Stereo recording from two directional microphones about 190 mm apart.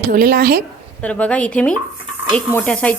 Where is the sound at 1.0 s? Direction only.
5° left (ahead or behind).